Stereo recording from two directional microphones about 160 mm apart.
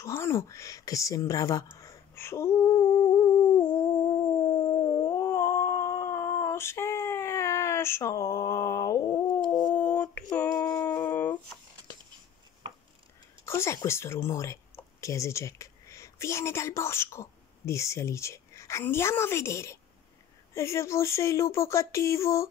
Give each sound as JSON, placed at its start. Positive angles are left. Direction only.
{"t": 0.0, "sound": "speech", "side_deg": 15}
{"t": 3.8, "sound": "howl", "side_deg": 30}
{"t": 5.2, "sound": "a sound", "side_deg": 15}
{"t": 9.8, "sound": "a sound", "side_deg": 10}
{"t": 10.3, "sound": "female singing", "side_deg": 10}
{"t": 13.5, "sound": "speech", "side_deg": 15}